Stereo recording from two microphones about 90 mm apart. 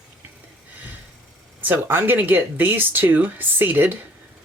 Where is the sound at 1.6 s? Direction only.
25° right (ahead or behind).